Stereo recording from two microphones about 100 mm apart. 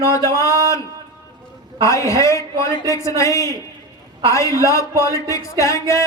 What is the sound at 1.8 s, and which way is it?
A man's voice, 30° left (ahead or behind).